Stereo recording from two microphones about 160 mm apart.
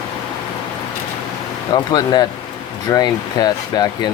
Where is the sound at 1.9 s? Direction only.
25° left (ahead or behind).